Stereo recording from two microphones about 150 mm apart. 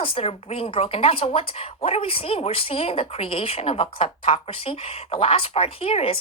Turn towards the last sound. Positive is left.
turn(degrees=40)  # may be behind; listen again after turning